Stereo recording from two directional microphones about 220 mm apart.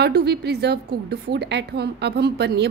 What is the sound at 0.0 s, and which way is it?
A woman's voice, 50° right (ahead or behind).